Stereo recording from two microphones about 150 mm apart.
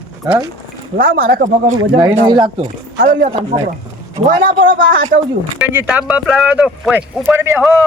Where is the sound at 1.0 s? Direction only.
70° right (ahead or behind).